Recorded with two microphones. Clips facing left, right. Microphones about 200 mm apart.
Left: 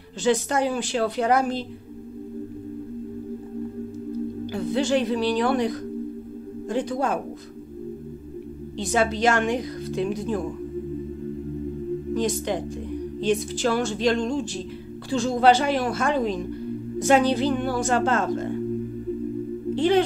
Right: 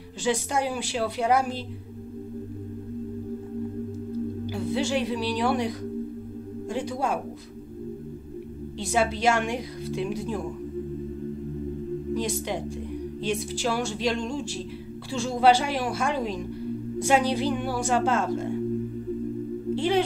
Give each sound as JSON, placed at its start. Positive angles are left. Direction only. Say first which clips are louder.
{"t": 0.2, "sound": "a woman's voice", "louder": "left 4 dB", "side_deg": -10}
{"t": 4.5, "sound": "a woman's voice", "louder": "left 5 dB", "side_deg": -10}
{"t": 8.7, "sound": "a woman's voice", "louder": "left 2 dB", "side_deg": -10}
{"t": 12.1, "sound": "a woman's voice", "louder": "left 4 dB", "side_deg": -10}
{"t": 19.7, "sound": "speech", "louder": "left 4 dB", "side_deg": -5}